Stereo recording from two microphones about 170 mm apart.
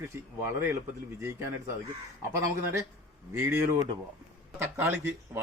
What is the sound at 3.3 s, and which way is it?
Speech, 15° right (ahead or behind).